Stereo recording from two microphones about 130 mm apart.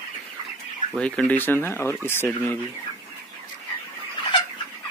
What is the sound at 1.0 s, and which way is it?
Speech, 10° left (ahead or behind).